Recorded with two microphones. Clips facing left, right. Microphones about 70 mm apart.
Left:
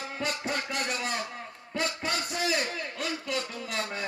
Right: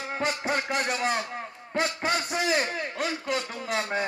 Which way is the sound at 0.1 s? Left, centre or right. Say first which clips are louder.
Right 5 dB; right.